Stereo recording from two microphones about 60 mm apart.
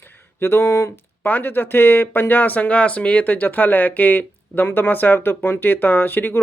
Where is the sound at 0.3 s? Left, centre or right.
Left.